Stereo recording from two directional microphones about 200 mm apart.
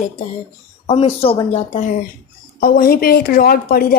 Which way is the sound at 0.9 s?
30° left (ahead or behind).